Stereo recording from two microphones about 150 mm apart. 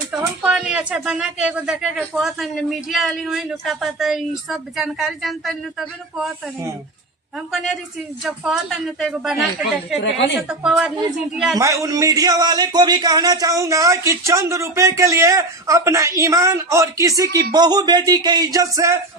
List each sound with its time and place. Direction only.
0.4 s a woman's voice: 5° right (ahead or behind)
7.5 s a woman's voice: centre (ahead or behind)
10.5 s a woman's voice: 5° right (ahead or behind)
11.5 s a man's voice: 20° right (ahead or behind)